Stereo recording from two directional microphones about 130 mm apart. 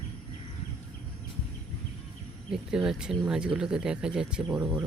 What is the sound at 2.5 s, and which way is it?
Speech, 5° right (ahead or behind).